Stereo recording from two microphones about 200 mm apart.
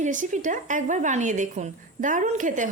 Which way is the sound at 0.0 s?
40° right (ahead or behind).